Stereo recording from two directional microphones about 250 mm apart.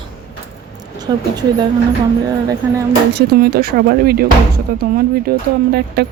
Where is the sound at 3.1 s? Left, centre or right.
Right.